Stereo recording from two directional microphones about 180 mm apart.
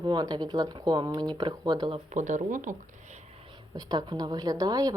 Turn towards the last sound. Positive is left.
turn(degrees=-20)  # may be behind; listen again after turning